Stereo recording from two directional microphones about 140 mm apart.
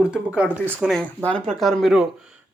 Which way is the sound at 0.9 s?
10° left (ahead or behind).